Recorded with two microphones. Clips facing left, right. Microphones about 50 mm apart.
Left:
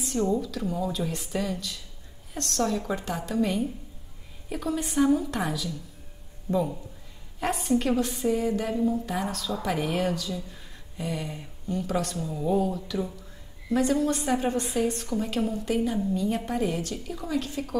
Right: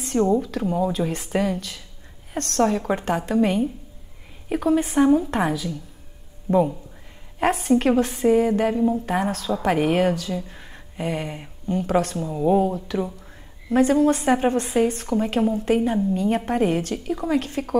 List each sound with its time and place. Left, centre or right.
0.2 s a woman's voice: right
7.3 s a woman's voice: right